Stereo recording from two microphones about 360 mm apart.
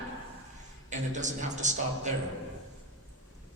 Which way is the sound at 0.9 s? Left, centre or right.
Centre.